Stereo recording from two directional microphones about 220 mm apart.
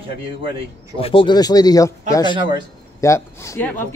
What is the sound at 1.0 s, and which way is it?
A man's voice, 25° left (ahead or behind).